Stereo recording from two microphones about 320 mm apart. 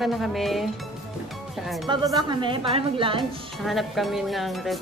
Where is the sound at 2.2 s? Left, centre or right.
Centre.